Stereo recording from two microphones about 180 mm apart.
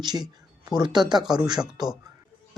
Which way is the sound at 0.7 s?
25° right (ahead or behind).